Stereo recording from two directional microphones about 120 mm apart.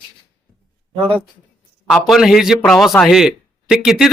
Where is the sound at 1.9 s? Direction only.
Centre (ahead or behind).